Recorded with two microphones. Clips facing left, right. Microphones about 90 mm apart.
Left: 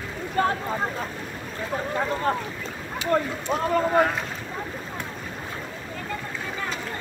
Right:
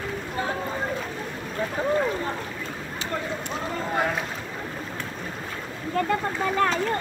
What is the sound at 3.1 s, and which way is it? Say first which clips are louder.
Speech: left 8 dB; 50° left (ahead or behind).